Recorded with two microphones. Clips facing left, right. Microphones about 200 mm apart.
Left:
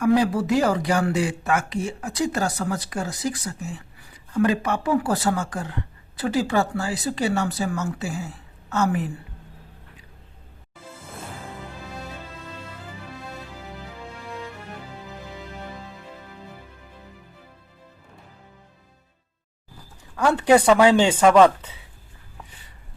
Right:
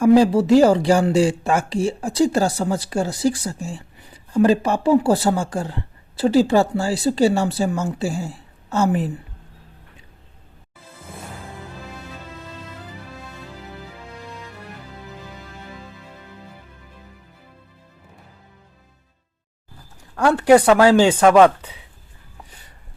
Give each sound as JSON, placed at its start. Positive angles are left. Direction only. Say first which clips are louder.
{"t": 0.0, "sound": "speech", "louder": "right 6 dB", "side_deg": -30}
{"t": 20.1, "sound": "speech", "louder": "right 4 dB", "side_deg": -10}